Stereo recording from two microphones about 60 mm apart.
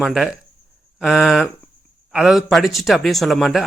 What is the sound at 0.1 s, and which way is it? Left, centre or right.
Speech, centre.